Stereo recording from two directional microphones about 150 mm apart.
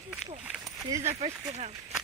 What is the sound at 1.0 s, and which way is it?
Speech, 45° right (ahead or behind).